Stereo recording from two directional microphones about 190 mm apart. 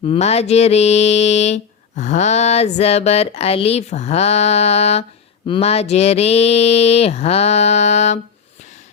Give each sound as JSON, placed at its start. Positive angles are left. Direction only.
{"t": 0.0, "sound": "mantra", "side_deg": 30}